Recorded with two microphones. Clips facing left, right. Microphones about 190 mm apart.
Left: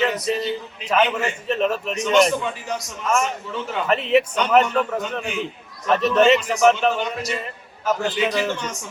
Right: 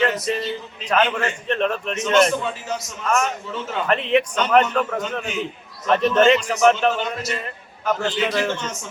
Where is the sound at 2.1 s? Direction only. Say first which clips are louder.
Even; 10° left (ahead or behind).